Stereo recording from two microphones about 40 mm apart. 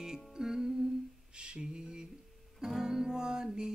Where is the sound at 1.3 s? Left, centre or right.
Right.